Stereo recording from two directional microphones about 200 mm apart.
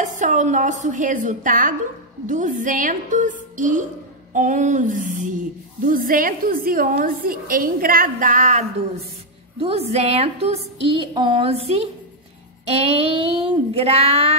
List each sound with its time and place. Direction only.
0.0 s a woman's voice: 40° right (ahead or behind)